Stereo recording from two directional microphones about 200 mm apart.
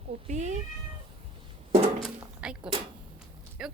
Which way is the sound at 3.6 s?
5° right (ahead or behind).